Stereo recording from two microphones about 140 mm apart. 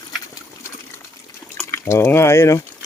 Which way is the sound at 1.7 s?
20° left (ahead or behind).